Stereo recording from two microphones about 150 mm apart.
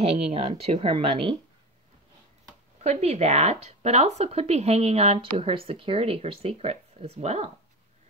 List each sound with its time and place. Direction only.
0.0 s speech: 40° right (ahead or behind)
2.8 s speech: 45° right (ahead or behind)